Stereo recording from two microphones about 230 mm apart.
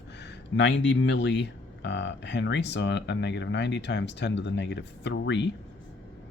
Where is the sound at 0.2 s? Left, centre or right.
Left.